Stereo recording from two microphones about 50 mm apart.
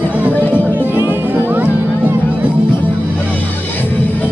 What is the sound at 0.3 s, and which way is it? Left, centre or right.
Music, left.